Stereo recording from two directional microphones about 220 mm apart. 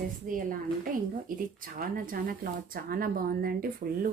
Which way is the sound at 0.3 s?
40° right (ahead or behind).